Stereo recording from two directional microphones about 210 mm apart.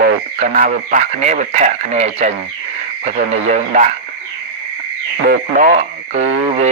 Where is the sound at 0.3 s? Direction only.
40° right (ahead or behind).